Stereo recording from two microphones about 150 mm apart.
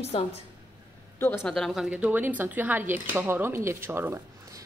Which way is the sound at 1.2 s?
15° left (ahead or behind).